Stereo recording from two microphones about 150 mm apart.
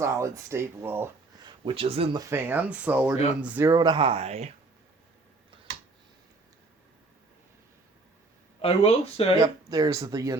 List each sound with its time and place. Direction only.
0.0 s speech: 20° right (ahead or behind)
1.5 s speech: 35° right (ahead or behind)
2.1 s speech: 15° right (ahead or behind)
3.7 s speech: 30° right (ahead or behind); by 4.5 s 45° right (ahead or behind)
8.6 s speech: 40° left (ahead or behind)
9.4 s speech: 25° right (ahead or behind)